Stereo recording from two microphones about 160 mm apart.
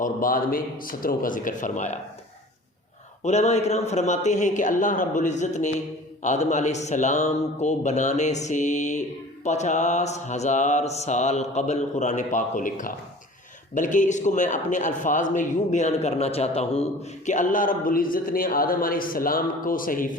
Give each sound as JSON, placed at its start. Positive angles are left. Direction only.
{"t": 0.0, "sound": "a man's voice", "side_deg": 60}
{"t": 3.2, "sound": "a man's voice", "side_deg": 45}